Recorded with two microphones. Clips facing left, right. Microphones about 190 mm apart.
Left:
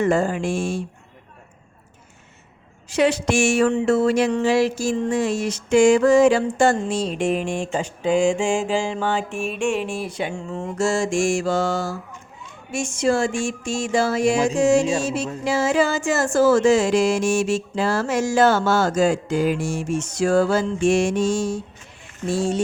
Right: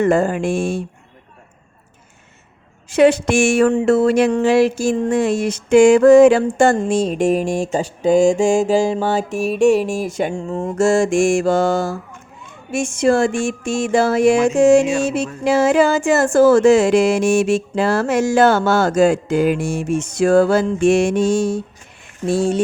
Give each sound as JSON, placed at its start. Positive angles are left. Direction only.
{"t": 0.0, "sound": "speech", "side_deg": -55}
{"t": 2.9, "sound": "speech", "side_deg": -55}